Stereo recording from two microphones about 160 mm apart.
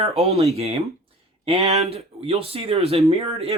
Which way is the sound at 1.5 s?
40° right (ahead or behind).